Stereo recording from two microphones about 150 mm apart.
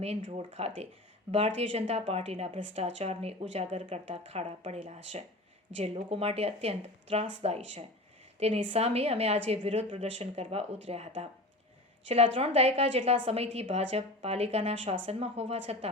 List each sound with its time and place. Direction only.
0.0 s speech: 45° right (ahead or behind)